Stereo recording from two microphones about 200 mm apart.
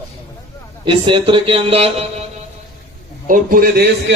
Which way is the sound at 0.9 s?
25° right (ahead or behind).